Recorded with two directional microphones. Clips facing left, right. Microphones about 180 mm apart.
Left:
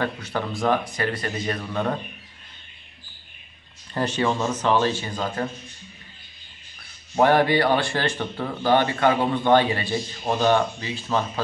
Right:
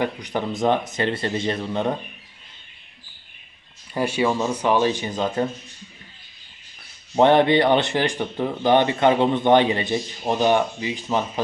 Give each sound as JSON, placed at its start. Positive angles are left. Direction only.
{"t": 0.0, "sound": "speech", "side_deg": -15}
{"t": 3.9, "sound": "speech", "side_deg": -10}
{"t": 7.2, "sound": "speech", "side_deg": -25}